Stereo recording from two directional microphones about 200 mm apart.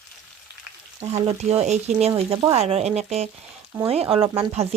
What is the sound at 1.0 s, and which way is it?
Speech, 30° right (ahead or behind).